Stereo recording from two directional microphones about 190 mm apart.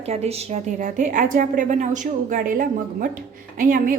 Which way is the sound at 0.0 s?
35° right (ahead or behind).